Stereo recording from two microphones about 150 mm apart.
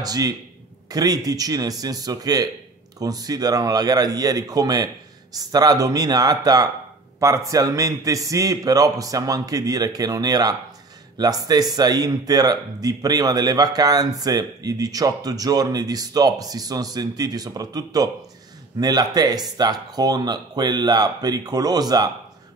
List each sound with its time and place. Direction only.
0.0 s speech: 25° right (ahead or behind)